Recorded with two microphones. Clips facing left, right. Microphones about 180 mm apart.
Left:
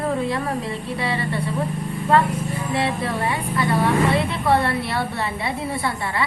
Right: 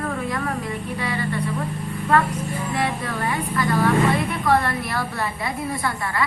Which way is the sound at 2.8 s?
30° left (ahead or behind).